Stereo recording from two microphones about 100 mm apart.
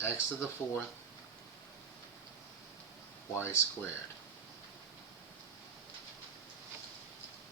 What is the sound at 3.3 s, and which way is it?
Speech, 25° left (ahead or behind).